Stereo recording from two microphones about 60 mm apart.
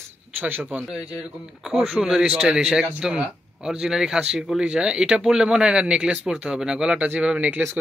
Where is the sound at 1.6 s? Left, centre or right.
Centre; by 7.6 s right.